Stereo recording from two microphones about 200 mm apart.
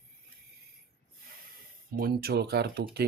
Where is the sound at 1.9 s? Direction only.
50° right (ahead or behind).